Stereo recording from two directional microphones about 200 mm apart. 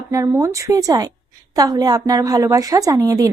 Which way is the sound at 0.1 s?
15° right (ahead or behind).